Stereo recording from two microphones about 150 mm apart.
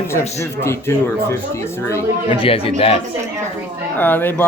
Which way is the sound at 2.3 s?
40° left (ahead or behind).